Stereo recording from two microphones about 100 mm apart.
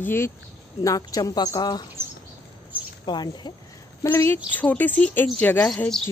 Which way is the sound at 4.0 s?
25° left (ahead or behind).